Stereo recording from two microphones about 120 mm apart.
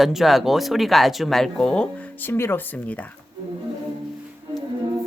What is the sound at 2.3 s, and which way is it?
Speech, 20° left (ahead or behind).